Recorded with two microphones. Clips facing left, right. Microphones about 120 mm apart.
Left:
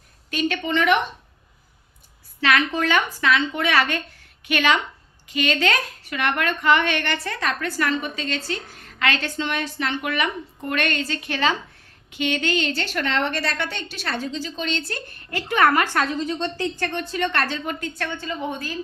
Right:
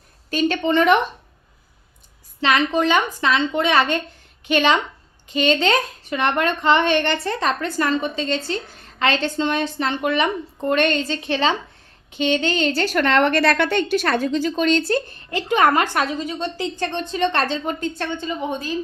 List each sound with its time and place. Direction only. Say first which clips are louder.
0.3 s a woman's voice: right 5 dB; 35° right (ahead or behind)
2.4 s a woman's voice: right 3 dB; 25° right (ahead or behind); by 14.8 s 50° right (ahead or behind)
14.8 s speech: right 11 dB; 30° right (ahead or behind)
15.4 s speech: right 2 dB; 20° right (ahead or behind)